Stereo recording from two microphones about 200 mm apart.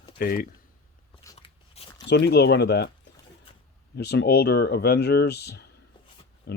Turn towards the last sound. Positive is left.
turn(degrees=50)  # may be behind; listen again after turning